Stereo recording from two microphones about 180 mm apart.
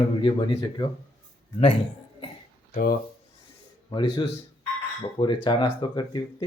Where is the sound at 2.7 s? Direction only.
55° left (ahead or behind).